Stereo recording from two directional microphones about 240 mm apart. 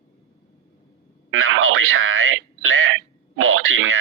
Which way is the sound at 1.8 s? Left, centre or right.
Right.